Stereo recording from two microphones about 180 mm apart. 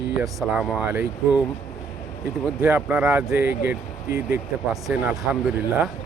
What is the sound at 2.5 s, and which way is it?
Speech, 5° right (ahead or behind).